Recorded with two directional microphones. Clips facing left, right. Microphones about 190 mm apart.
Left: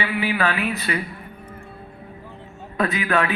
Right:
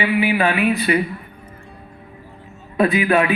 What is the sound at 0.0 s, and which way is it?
Mantra, 15° right (ahead or behind).